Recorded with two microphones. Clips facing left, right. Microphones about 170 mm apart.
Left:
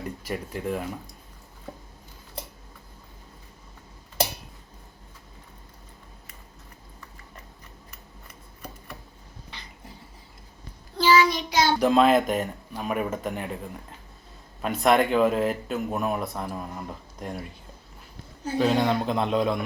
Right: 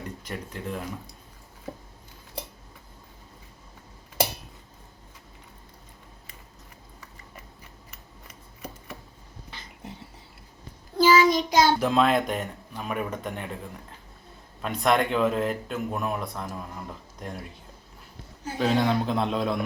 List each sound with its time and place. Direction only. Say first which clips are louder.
0.2 s speech: left 4 dB; 5° left (ahead or behind)
10.9 s child singing: right 2 dB; 45° right (ahead or behind)
11.8 s speech: left 3 dB; centre (ahead or behind)
14.6 s speech: left 3 dB; 5° left (ahead or behind)
18.6 s speech: left 1 dB; centre (ahead or behind)